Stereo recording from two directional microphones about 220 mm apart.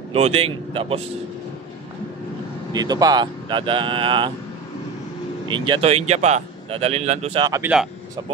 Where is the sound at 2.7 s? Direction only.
20° right (ahead or behind).